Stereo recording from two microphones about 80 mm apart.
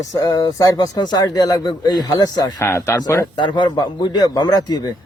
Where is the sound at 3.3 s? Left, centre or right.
Left.